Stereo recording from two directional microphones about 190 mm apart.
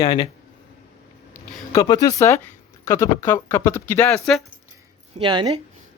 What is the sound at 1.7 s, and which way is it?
Speech, 20° left (ahead or behind).